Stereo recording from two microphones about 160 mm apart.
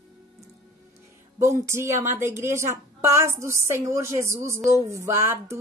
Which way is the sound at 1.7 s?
15° right (ahead or behind).